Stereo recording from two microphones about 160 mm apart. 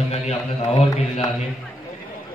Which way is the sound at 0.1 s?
40° left (ahead or behind).